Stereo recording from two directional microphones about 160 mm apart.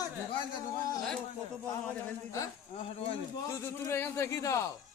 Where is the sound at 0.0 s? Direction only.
25° left (ahead or behind).